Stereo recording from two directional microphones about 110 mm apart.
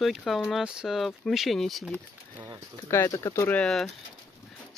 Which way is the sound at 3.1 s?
30° left (ahead or behind).